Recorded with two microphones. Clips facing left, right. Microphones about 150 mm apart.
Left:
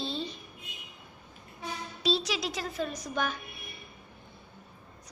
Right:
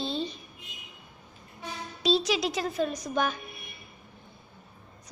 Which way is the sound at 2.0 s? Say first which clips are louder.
Right 4 dB; 20° right (ahead or behind).